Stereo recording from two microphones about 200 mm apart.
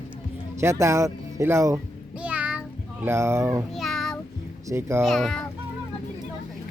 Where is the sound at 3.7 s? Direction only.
Centre (ahead or behind).